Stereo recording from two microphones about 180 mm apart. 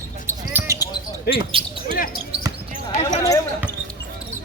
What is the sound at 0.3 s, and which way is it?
Basketball bounce, 15° right (ahead or behind).